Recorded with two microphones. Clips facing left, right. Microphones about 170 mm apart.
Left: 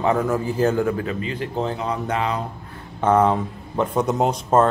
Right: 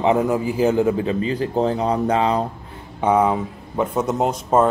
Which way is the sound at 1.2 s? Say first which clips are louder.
Right 5 dB; 35° right (ahead or behind).